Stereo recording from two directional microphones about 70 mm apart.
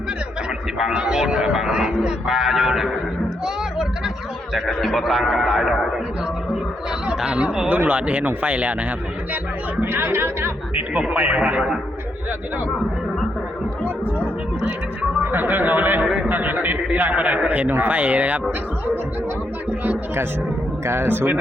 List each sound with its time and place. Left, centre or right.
0.8 s a man's voice: centre
7.1 s a man's voice: centre
9.8 s speech: right
10.9 s speech: right
15.2 s a man's voice: right
16.0 s speech: centre
16.3 s a man's voice: right
20.8 s speech: right